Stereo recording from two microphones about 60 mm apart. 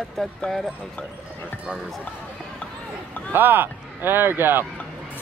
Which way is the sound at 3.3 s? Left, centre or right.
Right.